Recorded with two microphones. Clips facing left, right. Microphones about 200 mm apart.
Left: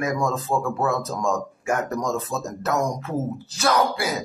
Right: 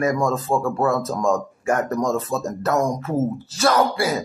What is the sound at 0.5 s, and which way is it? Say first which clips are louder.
Speech: right 2 dB; 15° right (ahead or behind).